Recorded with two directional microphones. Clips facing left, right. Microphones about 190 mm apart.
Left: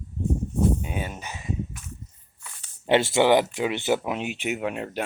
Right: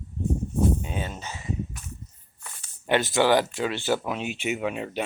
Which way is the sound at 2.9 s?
25° left (ahead or behind).